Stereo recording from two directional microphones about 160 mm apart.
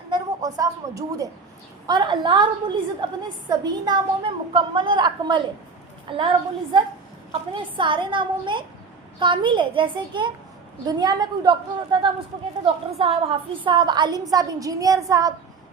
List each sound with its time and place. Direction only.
0.1 s a woman's voice: 25° right (ahead or behind)
7.5 s a child's voice: 30° right (ahead or behind)